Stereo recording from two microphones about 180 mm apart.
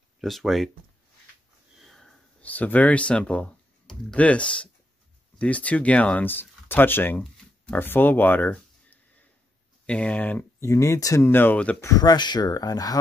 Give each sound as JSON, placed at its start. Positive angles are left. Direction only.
{"t": 0.2, "sound": "speech", "side_deg": 0}
{"t": 1.9, "sound": "a sound", "side_deg": 5}
{"t": 5.4, "sound": "speech", "side_deg": 10}
{"t": 11.9, "sound": "speech", "side_deg": 20}